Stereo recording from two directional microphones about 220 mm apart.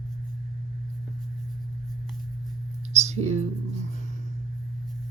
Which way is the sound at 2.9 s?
30° right (ahead or behind).